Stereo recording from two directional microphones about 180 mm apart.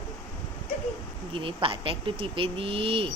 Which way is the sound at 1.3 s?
30° right (ahead or behind).